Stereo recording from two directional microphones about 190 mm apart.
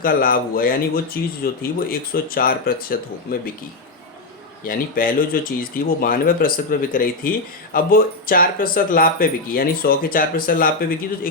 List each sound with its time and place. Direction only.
0.0 s speech: 50° left (ahead or behind)
4.6 s speech: 45° left (ahead or behind)